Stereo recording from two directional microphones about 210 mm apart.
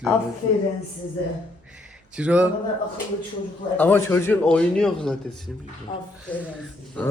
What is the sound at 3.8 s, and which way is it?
A man's voice, 10° left (ahead or behind).